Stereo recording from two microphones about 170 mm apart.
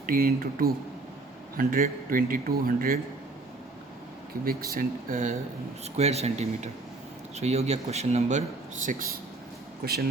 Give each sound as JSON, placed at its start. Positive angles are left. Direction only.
{"t": 0.0, "sound": "a man's voice", "side_deg": -60}
{"t": 4.4, "sound": "a man's voice", "side_deg": -60}
{"t": 6.0, "sound": "speech", "side_deg": -40}
{"t": 9.8, "sound": "speech", "side_deg": -65}